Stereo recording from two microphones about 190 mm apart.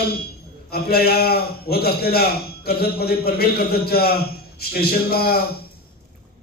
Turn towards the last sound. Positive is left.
turn(degrees=55)  # may be behind; listen again after turning